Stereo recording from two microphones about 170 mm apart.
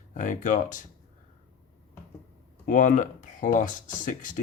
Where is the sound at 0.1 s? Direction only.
50° left (ahead or behind).